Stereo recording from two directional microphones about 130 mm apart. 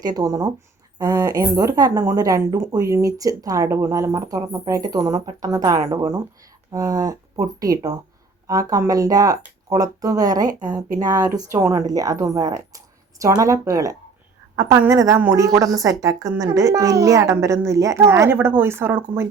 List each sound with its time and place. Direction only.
0.0 s a woman's voice: 30° right (ahead or behind)